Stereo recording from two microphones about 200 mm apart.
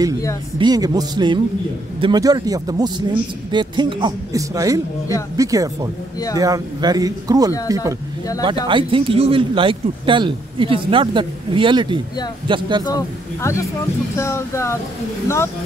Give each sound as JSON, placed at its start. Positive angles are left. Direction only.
{"t": 0.6, "sound": "a man's voice", "side_deg": -20}
{"t": 13.4, "sound": "speech", "side_deg": 15}